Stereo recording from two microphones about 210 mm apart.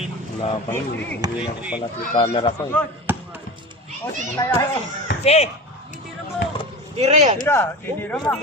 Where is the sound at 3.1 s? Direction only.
10° right (ahead or behind).